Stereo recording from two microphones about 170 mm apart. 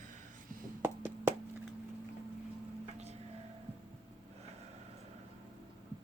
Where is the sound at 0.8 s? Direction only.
15° right (ahead or behind).